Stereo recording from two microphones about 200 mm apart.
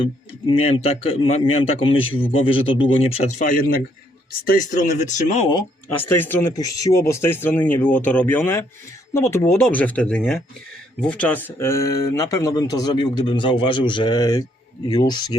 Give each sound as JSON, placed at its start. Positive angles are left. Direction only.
{"t": 0.0, "sound": "speech", "side_deg": 25}
{"t": 5.5, "sound": "speech", "side_deg": 10}